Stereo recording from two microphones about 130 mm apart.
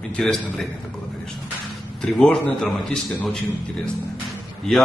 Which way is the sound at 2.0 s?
10° left (ahead or behind).